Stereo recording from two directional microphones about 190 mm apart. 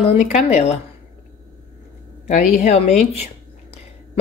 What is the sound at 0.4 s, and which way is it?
Speech, 35° left (ahead or behind).